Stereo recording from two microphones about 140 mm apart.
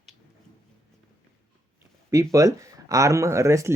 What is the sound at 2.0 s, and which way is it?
Speech, 20° right (ahead or behind).